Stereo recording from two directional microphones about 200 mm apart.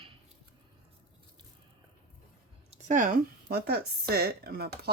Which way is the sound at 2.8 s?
40° right (ahead or behind).